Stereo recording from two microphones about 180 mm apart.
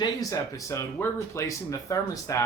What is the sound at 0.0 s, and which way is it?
Speech, 20° left (ahead or behind).